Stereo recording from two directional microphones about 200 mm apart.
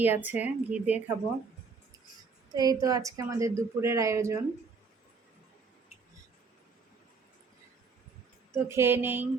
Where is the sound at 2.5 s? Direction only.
20° right (ahead or behind).